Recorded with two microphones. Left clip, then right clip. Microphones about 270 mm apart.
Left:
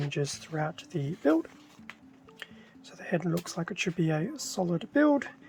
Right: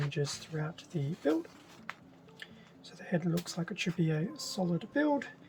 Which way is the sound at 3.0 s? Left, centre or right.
Centre.